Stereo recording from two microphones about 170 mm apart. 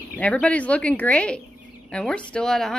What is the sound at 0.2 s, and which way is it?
A woman's voice, 10° left (ahead or behind).